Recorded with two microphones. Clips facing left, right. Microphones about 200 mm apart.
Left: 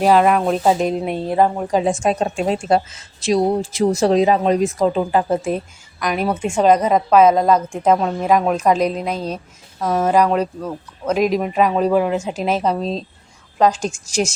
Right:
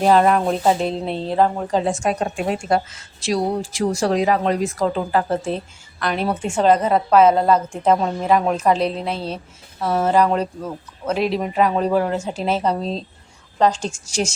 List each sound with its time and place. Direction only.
0.0 s speech: 10° left (ahead or behind)